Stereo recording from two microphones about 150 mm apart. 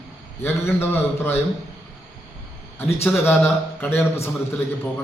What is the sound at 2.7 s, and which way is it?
A man's voice, 15° left (ahead or behind).